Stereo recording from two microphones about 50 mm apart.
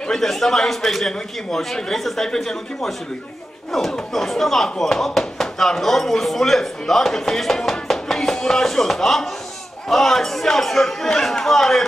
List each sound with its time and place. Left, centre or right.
0.1 s a man's voice: centre